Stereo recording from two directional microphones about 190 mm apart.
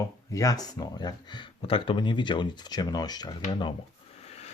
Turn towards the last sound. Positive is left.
turn(degrees=35)  # may be behind; listen again after turning